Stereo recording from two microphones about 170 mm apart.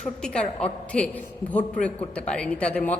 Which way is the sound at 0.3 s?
5° left (ahead or behind).